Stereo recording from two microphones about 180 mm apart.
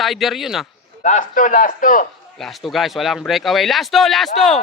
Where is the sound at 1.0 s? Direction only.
45° left (ahead or behind).